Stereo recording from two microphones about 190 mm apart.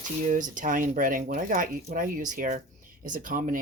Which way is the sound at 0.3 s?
45° right (ahead or behind).